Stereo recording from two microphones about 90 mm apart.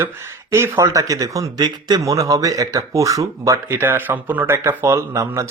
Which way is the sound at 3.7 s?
25° right (ahead or behind).